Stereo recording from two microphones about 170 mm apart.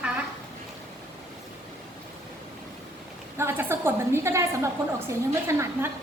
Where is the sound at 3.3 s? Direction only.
15° right (ahead or behind).